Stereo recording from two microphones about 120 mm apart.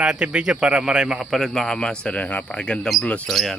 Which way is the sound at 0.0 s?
10° right (ahead or behind).